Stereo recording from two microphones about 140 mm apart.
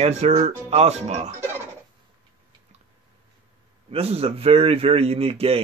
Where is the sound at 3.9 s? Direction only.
45° right (ahead or behind).